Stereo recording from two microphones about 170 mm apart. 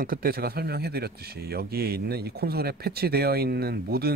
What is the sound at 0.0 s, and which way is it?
A man's voice, 60° right (ahead or behind).